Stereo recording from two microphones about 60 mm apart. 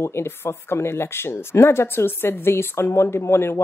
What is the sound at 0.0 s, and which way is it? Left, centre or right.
Speech, left.